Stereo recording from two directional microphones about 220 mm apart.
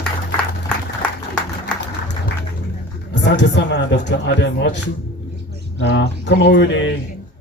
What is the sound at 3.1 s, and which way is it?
A man's voice, 55° left (ahead or behind).